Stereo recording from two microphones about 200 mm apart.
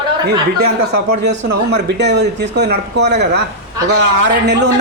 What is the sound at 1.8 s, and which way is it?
Speech, 60° right (ahead or behind).